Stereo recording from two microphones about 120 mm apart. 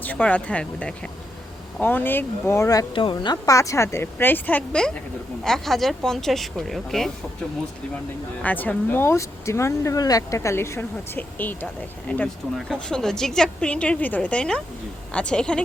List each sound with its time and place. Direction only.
0.0 s a woman's voice: 15° left (ahead or behind)
2.9 s a woman's voice: 45° left (ahead or behind)
3.4 s a woman's voice: 25° left (ahead or behind); by 7.1 s centre (ahead or behind)
8.4 s a woman's voice: 15° left (ahead or behind)